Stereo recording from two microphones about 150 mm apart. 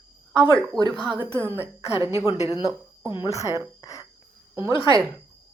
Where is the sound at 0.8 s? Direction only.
25° right (ahead or behind).